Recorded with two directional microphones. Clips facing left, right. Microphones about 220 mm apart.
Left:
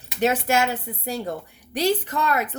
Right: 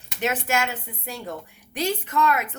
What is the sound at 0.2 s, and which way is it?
Speech, 35° left (ahead or behind).